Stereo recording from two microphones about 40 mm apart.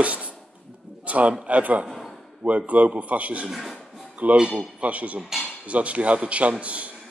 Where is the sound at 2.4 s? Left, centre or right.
Right.